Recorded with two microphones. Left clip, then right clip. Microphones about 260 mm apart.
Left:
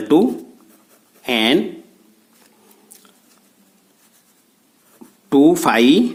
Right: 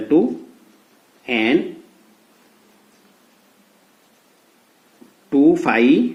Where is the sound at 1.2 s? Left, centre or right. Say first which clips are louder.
Left 2 dB; left.